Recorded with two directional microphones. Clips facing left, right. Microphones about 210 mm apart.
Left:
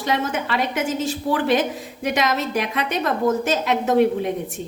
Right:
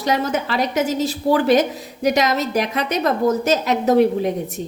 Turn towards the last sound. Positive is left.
turn(degrees=-40)  # may be behind; listen again after turning